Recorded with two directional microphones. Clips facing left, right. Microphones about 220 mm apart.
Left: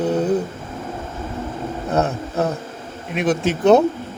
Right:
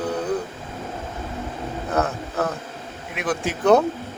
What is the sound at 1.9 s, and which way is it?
A man's voice, 25° left (ahead or behind).